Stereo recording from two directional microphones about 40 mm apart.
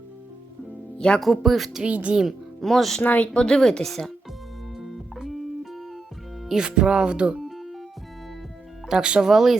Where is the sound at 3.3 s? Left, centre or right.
Centre.